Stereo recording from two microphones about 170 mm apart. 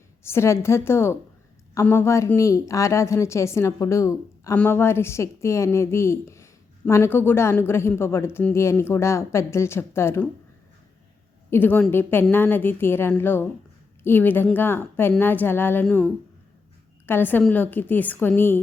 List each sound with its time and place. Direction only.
0.2 s a woman's voice: 15° left (ahead or behind)
11.5 s a woman's voice: 10° left (ahead or behind)